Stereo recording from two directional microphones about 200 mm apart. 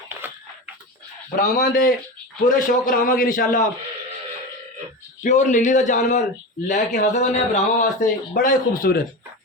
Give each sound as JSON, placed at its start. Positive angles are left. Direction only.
{"t": 0.2, "sound": "a sound", "side_deg": -10}
{"t": 1.4, "sound": "a man's voice", "side_deg": 45}
{"t": 5.2, "sound": "a man's voice", "side_deg": 40}